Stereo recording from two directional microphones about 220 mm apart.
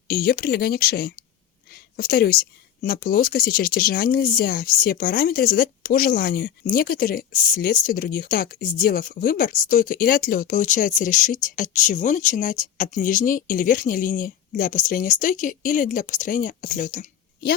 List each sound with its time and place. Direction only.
0.1 s speech: 45° left (ahead or behind)